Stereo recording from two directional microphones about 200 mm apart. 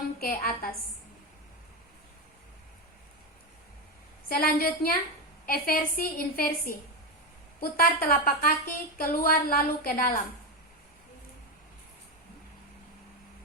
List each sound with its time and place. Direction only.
0.2 s speech: 45° left (ahead or behind)
4.3 s speech: 50° left (ahead or behind)